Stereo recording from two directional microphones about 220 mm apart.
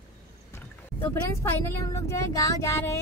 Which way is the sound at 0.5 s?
10° left (ahead or behind).